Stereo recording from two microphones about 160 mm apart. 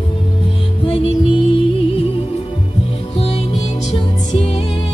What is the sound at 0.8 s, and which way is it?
Music, 35° left (ahead or behind).